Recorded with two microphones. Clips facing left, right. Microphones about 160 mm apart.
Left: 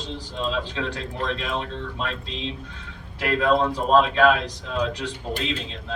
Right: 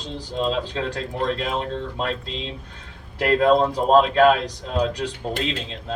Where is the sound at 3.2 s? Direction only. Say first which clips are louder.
Right 4 dB; 40° right (ahead or behind).